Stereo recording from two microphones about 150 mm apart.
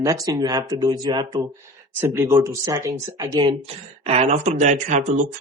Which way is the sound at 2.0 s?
15° right (ahead or behind).